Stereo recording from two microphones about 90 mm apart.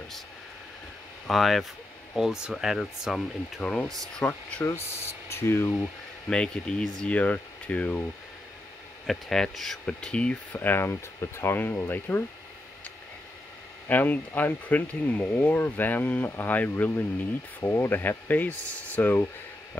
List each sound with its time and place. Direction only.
1.3 s speech: centre (ahead or behind)
4.2 s speech: 15° left (ahead or behind)
4.6 s speech: 30° left (ahead or behind)
6.3 s speech: 10° left (ahead or behind)
9.0 s speech: 5° left (ahead or behind); by 12.2 s 25° left (ahead or behind)
13.8 s speech: 20° left (ahead or behind)